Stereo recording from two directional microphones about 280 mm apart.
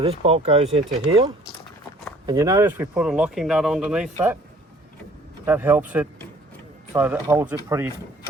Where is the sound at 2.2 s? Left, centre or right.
Centre.